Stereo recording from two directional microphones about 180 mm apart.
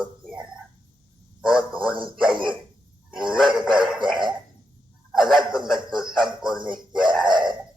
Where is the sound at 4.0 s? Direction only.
25° right (ahead or behind).